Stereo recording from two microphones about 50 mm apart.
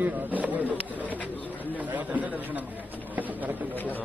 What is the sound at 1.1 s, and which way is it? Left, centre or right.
Bird, left.